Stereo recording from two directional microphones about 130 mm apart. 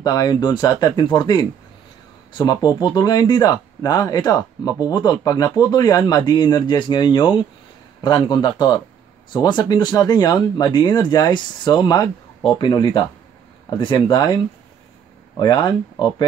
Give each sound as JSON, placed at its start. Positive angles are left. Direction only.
{"t": 0.0, "sound": "speech", "side_deg": 30}